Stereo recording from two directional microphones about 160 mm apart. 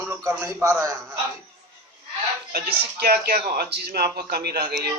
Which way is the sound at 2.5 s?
75° right (ahead or behind).